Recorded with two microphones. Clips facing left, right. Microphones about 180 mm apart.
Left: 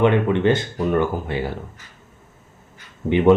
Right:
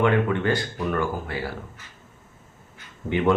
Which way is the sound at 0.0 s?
20° left (ahead or behind).